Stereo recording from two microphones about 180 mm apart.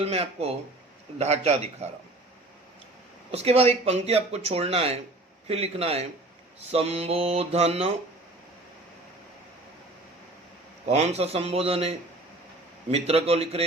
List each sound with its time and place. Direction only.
0.0 s speech: 35° right (ahead or behind)
3.3 s speech: 35° right (ahead or behind)
10.8 s speech: 35° right (ahead or behind)